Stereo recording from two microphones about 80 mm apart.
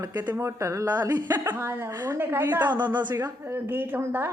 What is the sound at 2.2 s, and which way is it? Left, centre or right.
Speech, right.